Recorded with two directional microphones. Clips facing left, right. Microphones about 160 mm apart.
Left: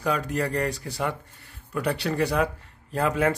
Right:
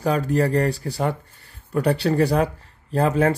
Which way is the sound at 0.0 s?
35° right (ahead or behind).